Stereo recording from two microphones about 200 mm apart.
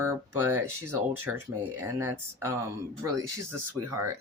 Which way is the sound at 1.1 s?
90° right.